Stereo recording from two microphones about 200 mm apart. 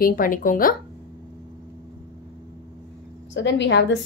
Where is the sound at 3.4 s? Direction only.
60° left (ahead or behind).